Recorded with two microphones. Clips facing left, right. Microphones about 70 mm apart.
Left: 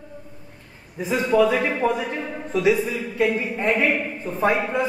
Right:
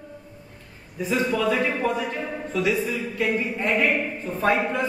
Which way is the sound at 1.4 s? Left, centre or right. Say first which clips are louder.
Left 4 dB; left.